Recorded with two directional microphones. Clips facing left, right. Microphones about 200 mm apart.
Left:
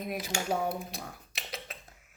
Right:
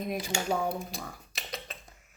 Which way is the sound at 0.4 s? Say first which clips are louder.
Even; 5° left (ahead or behind).